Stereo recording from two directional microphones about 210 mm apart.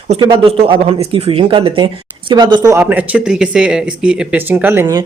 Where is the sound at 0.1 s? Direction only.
25° right (ahead or behind).